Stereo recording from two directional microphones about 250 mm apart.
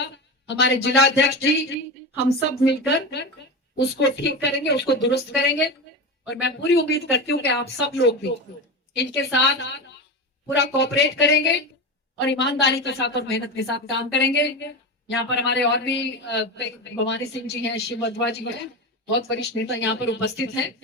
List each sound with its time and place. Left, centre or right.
0.0 s a man's voice: left